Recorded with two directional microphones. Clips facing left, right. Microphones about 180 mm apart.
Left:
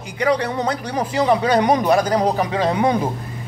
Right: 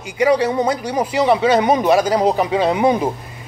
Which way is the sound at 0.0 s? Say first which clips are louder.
Right 4 dB; 10° right (ahead or behind).